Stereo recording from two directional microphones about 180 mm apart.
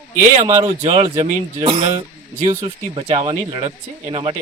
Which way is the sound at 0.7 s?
35° right (ahead or behind).